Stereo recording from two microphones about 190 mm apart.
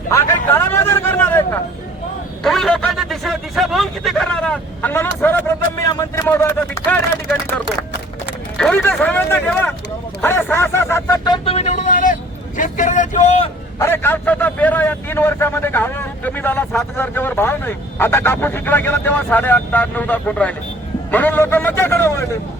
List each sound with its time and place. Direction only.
0.1 s a man's voice: 15° left (ahead or behind)
2.4 s speech: centre (ahead or behind)
8.5 s speech: 5° left (ahead or behind)
10.2 s a sound: 15° left (ahead or behind)
11.4 s vehicle: 35° left (ahead or behind)
13.7 s a man's voice: 15° left (ahead or behind)